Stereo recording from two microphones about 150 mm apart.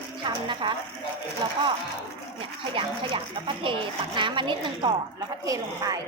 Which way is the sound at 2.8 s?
35° right (ahead or behind).